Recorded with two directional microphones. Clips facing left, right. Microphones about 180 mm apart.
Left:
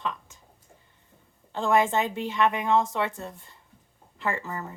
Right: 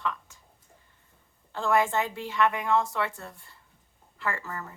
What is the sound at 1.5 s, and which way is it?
Speech, 20° left (ahead or behind).